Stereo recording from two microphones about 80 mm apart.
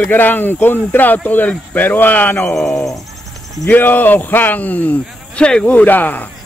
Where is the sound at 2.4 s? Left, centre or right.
Centre.